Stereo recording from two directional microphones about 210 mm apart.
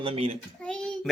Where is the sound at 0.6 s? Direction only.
5° left (ahead or behind).